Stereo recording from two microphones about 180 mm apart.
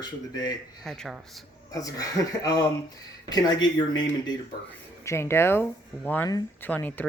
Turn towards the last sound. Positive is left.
turn(degrees=10)  # may be behind; listen again after turning